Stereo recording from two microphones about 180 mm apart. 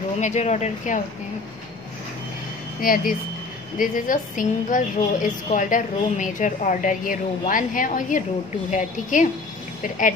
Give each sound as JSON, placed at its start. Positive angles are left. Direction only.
{"t": 0.2, "sound": "speech", "side_deg": 40}
{"t": 2.8, "sound": "a woman's voice", "side_deg": 50}